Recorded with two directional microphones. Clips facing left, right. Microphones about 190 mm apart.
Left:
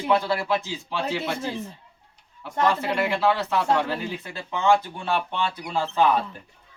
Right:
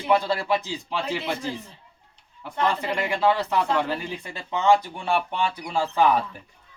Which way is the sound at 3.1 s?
15° right (ahead or behind).